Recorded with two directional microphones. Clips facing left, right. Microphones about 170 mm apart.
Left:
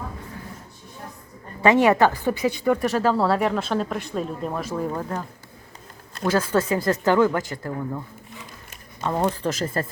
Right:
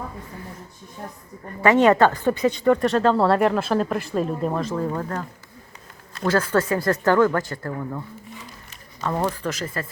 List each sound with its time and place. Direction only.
1.6 s speech: 10° left (ahead or behind)
4.6 s speech: 10° left (ahead or behind)
6.2 s speech: 15° left (ahead or behind)
9.2 s speech: 25° left (ahead or behind)